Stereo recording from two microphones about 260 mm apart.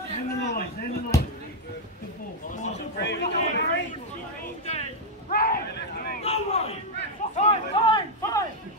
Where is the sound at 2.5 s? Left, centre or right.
Left.